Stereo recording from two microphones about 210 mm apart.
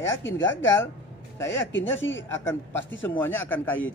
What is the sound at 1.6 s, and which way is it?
Speech, 65° left (ahead or behind).